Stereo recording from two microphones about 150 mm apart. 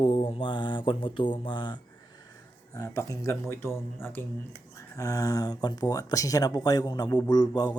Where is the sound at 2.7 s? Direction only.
20° left (ahead or behind).